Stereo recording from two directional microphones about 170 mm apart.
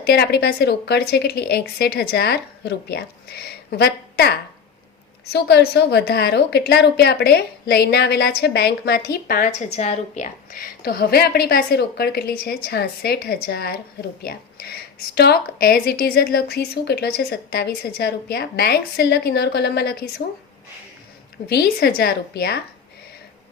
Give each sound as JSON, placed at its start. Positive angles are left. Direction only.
{"t": 0.0, "sound": "a woman's voice", "side_deg": 70}
{"t": 9.7, "sound": "a woman's voice", "side_deg": 40}
{"t": 21.4, "sound": "a woman's voice", "side_deg": 70}